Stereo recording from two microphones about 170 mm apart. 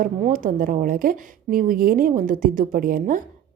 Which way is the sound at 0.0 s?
50° right (ahead or behind).